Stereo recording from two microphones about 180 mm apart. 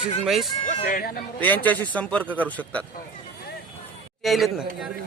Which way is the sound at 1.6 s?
10° left (ahead or behind).